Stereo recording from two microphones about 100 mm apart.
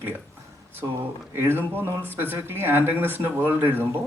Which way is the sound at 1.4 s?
20° right (ahead or behind).